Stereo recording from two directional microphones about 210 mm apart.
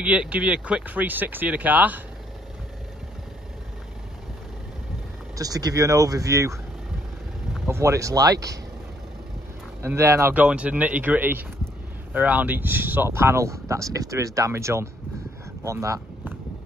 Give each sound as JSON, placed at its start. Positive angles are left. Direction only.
{"t": 0.0, "sound": "speech", "side_deg": -5}
{"t": 5.3, "sound": "speech", "side_deg": -15}
{"t": 7.6, "sound": "speech", "side_deg": -15}
{"t": 9.8, "sound": "speech", "side_deg": -10}